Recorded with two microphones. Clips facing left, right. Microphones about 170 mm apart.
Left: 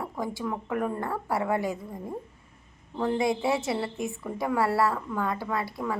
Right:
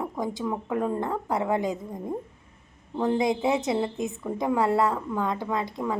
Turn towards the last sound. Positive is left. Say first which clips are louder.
# right 2 dB
turn(degrees=-20)  # may be behind; listen again after turning